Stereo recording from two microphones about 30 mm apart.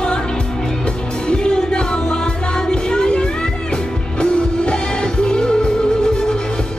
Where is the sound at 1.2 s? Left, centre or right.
Left.